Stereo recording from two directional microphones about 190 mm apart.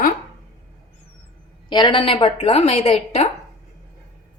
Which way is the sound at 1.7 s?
25° left (ahead or behind).